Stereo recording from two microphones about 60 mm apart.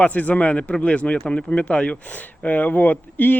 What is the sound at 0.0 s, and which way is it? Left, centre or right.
Speech, left.